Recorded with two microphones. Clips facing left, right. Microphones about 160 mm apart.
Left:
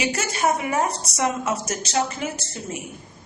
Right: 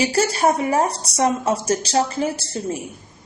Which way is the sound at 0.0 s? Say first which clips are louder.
Right 5 dB; 35° right (ahead or behind).